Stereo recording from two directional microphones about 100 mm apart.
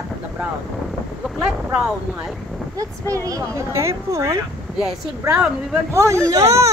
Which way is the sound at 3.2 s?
35° right (ahead or behind).